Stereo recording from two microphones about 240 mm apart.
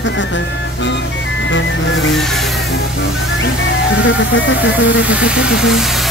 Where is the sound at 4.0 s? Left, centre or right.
Left.